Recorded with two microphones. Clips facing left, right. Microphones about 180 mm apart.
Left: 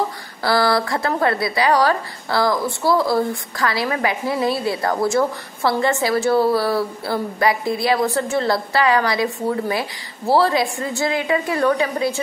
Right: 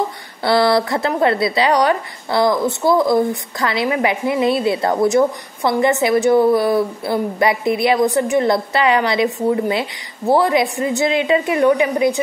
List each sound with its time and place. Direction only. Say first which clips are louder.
0.4 s speech: right 3 dB; 25° right (ahead or behind)